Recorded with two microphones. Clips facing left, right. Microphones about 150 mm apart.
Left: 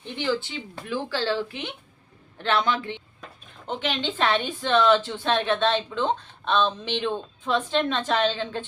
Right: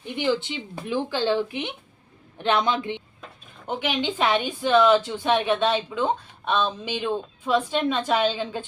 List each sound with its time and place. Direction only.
0.0 s a woman's voice: 15° right (ahead or behind)